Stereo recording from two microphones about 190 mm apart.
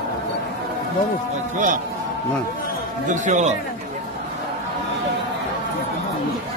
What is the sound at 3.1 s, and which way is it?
Speech, 40° right (ahead or behind).